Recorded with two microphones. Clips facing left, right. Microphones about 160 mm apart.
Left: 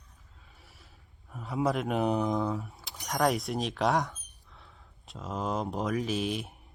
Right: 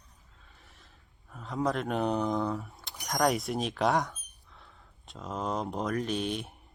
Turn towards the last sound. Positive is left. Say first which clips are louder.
# left 1 dB
turn(degrees=0)  # may be behind; listen again after turning